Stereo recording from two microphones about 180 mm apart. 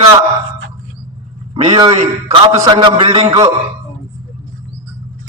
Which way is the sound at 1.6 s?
25° right (ahead or behind).